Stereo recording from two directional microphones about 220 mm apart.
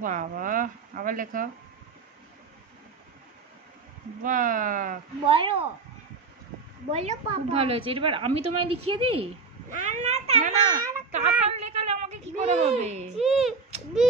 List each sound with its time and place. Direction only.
0.0 s speech: 35° right (ahead or behind)
4.2 s speech: 35° right (ahead or behind)
5.2 s a woman's voice: 25° right (ahead or behind)
6.9 s a woman's voice: 30° right (ahead or behind)
8.5 s speech: 90° right
8.9 s a woman's voice: 25° right (ahead or behind)
13.2 s speech: centre (ahead or behind)